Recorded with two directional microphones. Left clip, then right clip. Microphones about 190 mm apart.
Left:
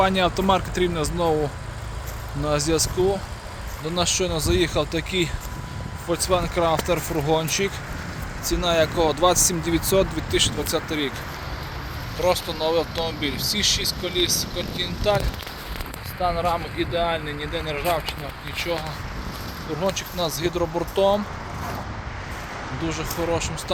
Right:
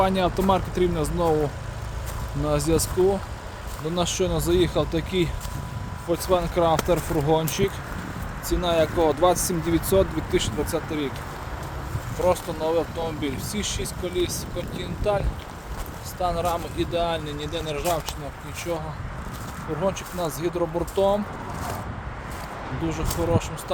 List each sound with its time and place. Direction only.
0.0 s speech: centre (ahead or behind)
2.4 s speech: 5° right (ahead or behind)
3.9 s speech: 10° right (ahead or behind)
12.2 s speech: 5° right (ahead or behind)
16.2 s speech: 10° right (ahead or behind)
19.8 s speech: centre (ahead or behind)
23.3 s speech: 5° right (ahead or behind)